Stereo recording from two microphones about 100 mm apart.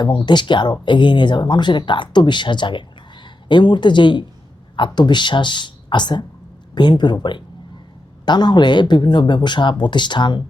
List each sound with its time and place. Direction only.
0.3 s speech: 50° left (ahead or behind)